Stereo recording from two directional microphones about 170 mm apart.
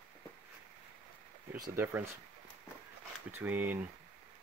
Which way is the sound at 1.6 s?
15° right (ahead or behind).